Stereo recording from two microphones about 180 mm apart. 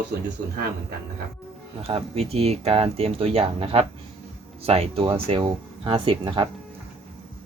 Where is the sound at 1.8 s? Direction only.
35° right (ahead or behind).